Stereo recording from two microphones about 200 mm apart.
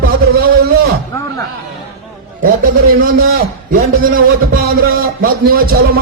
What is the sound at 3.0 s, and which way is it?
A man's voice, 45° right (ahead or behind).